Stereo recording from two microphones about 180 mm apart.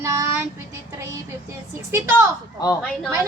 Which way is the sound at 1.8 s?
15° right (ahead or behind).